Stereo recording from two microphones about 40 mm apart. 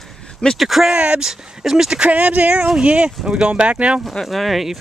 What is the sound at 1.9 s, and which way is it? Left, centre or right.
Speech, right.